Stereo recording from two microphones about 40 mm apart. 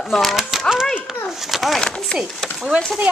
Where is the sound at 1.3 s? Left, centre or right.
Centre.